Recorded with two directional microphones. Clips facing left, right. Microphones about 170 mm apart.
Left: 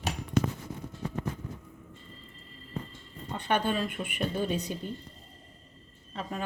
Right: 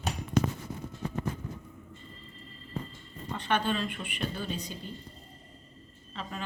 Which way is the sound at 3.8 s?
45° left (ahead or behind).